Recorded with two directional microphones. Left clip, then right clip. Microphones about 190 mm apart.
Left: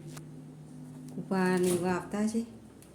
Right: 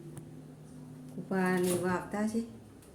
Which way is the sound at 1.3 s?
10° left (ahead or behind).